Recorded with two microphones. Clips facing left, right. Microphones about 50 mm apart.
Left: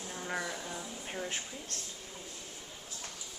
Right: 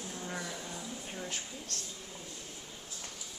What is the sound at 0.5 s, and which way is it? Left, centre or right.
Music, centre.